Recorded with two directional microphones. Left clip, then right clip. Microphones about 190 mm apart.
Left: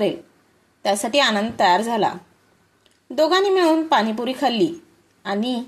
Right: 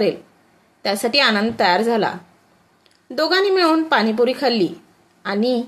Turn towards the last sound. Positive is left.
turn(degrees=20)  # may be behind; listen again after turning